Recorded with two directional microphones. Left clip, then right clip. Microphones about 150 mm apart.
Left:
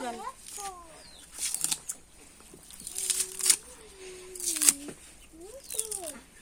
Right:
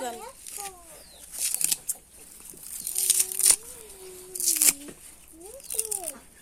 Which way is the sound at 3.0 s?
15° right (ahead or behind).